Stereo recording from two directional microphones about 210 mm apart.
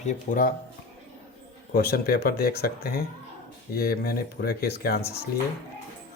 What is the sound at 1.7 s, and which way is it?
Speech, 45° left (ahead or behind).